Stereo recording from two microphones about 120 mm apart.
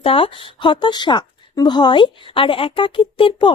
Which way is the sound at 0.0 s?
50° left (ahead or behind).